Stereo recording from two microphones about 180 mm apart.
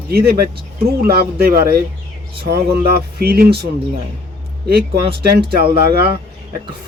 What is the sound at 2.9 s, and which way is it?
Speech, 60° right (ahead or behind).